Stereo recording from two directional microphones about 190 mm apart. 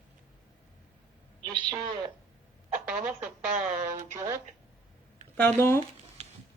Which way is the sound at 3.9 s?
15° right (ahead or behind).